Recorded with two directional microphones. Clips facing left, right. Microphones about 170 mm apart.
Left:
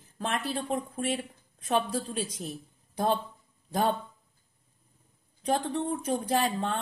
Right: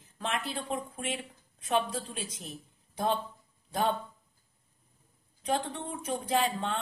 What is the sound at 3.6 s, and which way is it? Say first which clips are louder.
Speech: left 2 dB; 40° left (ahead or behind).